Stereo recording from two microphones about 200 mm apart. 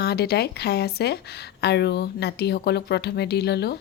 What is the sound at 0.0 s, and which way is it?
Speech, 55° left (ahead or behind).